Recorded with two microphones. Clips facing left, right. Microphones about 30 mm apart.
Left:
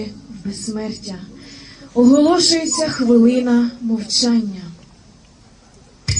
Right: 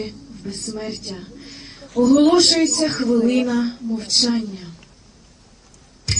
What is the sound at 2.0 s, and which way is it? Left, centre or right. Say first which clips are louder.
A woman's voice: left 2 dB; centre.